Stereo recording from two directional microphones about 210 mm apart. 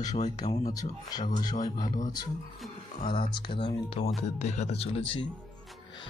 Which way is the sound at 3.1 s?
25° left (ahead or behind).